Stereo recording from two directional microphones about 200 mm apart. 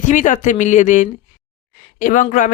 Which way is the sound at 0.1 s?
40° left (ahead or behind).